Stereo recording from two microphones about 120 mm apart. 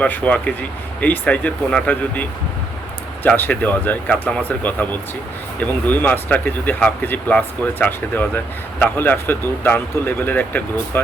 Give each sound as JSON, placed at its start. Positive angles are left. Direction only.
{"t": 0.0, "sound": "speech", "side_deg": 10}
{"t": 3.2, "sound": "speech", "side_deg": 15}